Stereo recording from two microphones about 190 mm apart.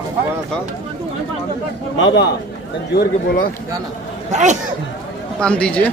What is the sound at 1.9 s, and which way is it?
Speech, 90° left.